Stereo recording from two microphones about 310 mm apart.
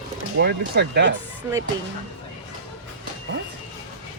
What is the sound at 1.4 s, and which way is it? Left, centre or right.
Speech, centre.